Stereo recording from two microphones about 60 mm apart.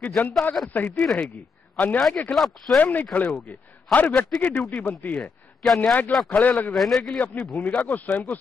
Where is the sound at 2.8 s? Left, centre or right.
Left.